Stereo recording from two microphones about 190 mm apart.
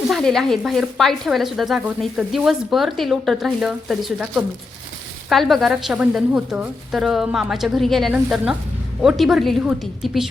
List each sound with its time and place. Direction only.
0.1 s speech: centre (ahead or behind)